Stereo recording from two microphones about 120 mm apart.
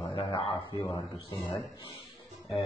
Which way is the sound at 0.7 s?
30° left (ahead or behind).